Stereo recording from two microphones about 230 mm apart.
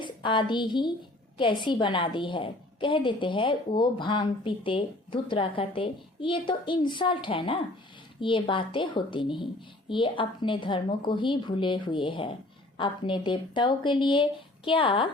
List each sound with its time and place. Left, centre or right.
0.0 s a woman's voice: left